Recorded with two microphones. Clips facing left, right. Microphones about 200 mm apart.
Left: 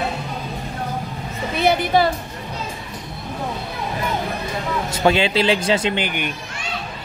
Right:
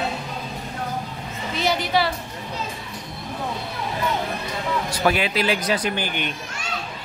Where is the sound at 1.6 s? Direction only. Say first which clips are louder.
Left 5 dB; 55° left (ahead or behind).